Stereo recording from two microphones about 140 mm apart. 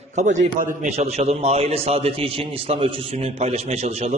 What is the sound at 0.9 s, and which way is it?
A man's voice, 50° right (ahead or behind).